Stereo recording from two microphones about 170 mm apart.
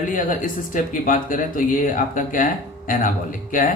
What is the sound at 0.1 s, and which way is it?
Speech, 50° left (ahead or behind).